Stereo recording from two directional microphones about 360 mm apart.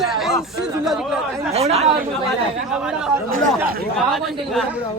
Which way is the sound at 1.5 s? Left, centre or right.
Centre.